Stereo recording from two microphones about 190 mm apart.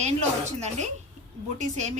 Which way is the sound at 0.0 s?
35° right (ahead or behind).